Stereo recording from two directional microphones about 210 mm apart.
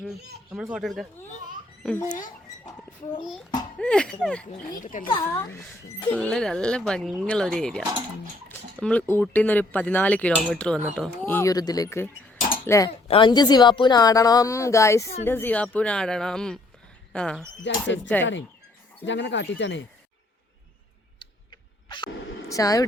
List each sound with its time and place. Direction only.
0.5 s speech: centre (ahead or behind)
3.8 s speech: 5° left (ahead or behind)
4.7 s speech: 40° left (ahead or behind)
5.0 s a woman's voice: 20° left (ahead or behind)
17.6 s speech: 60° left (ahead or behind)
21.8 s speech: 20° left (ahead or behind)